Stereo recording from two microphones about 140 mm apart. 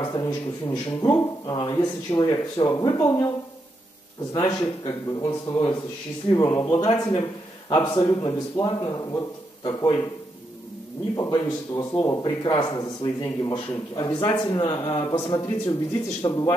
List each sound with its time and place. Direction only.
0.0 s a man's voice: 30° left (ahead or behind)
4.3 s a man's voice: 30° left (ahead or behind)
11.1 s a man's voice: 25° left (ahead or behind)